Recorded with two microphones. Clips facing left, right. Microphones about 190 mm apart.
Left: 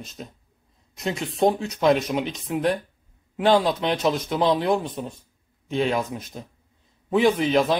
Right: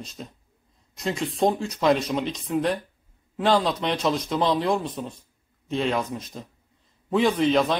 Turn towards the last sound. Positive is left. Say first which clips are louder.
# left 1 dB
turn(degrees=0)  # may be behind; listen again after turning